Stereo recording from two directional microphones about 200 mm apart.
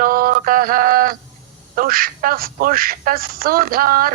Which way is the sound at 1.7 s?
45° right (ahead or behind).